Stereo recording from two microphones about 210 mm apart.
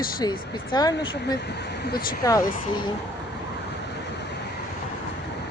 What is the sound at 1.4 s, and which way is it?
Speech, 55° left (ahead or behind).